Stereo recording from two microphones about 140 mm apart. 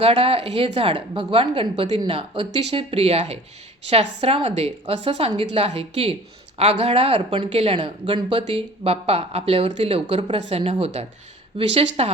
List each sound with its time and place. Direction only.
0.0 s a woman's voice: 40° right (ahead or behind)